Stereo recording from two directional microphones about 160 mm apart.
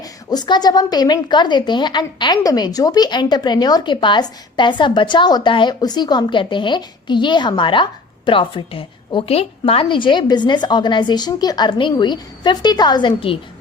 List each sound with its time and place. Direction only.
0.0 s a woman's voice: 25° left (ahead or behind)